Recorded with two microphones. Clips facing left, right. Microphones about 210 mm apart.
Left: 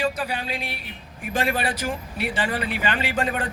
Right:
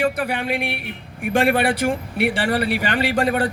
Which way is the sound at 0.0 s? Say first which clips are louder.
Right 5 dB; 65° right (ahead or behind).